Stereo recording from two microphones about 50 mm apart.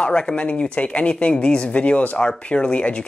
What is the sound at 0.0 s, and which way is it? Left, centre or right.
Speech, centre.